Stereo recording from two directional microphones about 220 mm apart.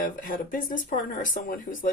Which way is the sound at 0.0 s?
40° left (ahead or behind).